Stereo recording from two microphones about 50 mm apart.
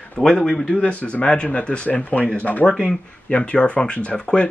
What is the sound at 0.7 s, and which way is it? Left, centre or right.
Speech, left.